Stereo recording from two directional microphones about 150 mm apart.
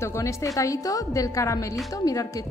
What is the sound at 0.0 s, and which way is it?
A woman's voice, 20° left (ahead or behind).